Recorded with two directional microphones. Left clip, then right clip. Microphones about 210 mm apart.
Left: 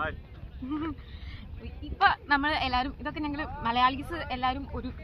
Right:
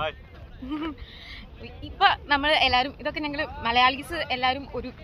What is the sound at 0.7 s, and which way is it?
Speech, 5° left (ahead or behind).